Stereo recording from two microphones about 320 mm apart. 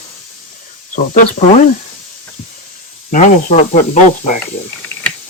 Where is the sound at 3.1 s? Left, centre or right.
Left.